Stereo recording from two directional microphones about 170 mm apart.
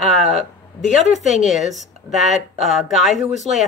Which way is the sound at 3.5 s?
35° right (ahead or behind).